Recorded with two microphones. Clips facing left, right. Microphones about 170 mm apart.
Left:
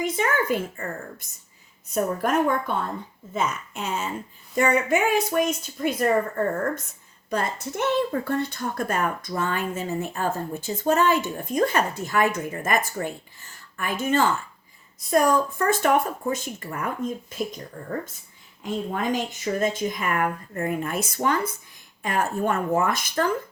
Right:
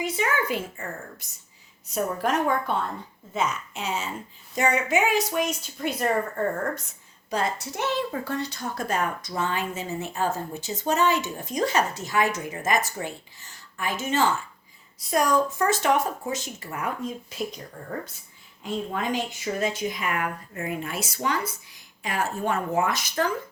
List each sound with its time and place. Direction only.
0.0 s a sound: 50° left (ahead or behind)
1.9 s speech: 50° left (ahead or behind)
18.6 s speech: 45° left (ahead or behind)